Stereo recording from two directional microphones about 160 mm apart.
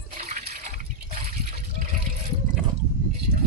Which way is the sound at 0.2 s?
50° right (ahead or behind).